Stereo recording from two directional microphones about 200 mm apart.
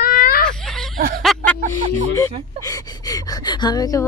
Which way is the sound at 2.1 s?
15° left (ahead or behind).